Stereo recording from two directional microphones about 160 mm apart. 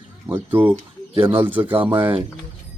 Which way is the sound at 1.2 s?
35° right (ahead or behind).